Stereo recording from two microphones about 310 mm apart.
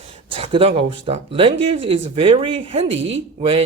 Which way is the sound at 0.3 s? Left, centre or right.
Centre.